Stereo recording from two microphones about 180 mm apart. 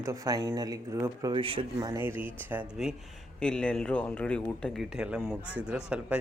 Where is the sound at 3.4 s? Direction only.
5° left (ahead or behind).